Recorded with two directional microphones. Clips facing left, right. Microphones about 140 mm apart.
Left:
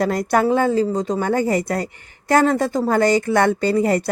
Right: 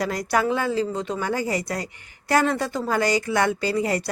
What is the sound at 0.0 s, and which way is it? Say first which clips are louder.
Speech: left 5 dB; 50° left (ahead or behind).